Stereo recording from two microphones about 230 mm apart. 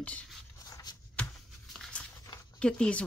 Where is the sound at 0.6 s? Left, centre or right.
Centre.